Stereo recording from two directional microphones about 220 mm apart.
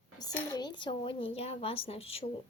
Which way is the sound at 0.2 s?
20° left (ahead or behind).